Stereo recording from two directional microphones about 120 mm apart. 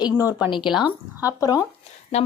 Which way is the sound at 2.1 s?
65° left (ahead or behind).